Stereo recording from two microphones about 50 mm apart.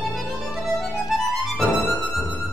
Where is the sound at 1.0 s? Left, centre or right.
Centre.